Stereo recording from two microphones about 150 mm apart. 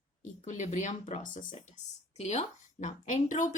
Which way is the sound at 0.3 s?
55° left (ahead or behind).